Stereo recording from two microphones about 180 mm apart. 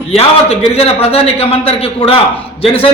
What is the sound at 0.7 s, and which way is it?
A man's voice, 35° left (ahead or behind).